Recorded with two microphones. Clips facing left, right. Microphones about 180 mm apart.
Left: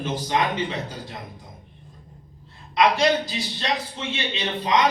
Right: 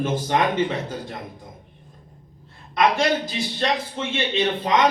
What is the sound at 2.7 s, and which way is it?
A man's voice, 50° right (ahead or behind).